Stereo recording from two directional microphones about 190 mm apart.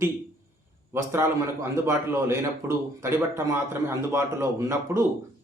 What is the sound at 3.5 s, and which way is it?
A man's voice, 15° right (ahead or behind).